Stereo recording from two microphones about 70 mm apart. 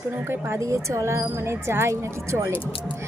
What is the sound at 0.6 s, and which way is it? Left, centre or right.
Speech, right.